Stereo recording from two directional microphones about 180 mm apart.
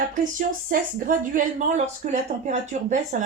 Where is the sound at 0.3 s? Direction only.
50° right (ahead or behind).